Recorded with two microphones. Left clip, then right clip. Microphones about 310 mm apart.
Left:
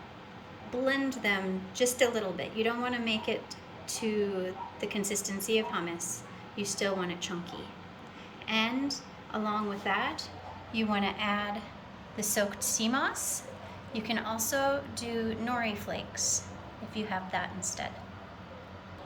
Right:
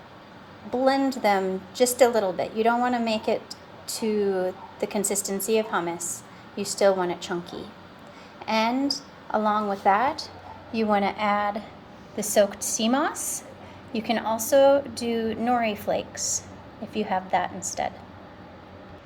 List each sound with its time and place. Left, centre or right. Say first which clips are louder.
0.9 s a woman's voice: right 8 dB; centre
8.4 s a woman's voice: right 7 dB; centre